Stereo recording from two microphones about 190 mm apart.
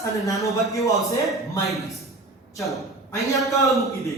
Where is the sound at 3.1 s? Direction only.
15° left (ahead or behind).